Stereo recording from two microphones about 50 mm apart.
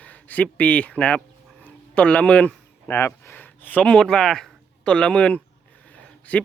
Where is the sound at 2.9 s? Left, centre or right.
Left.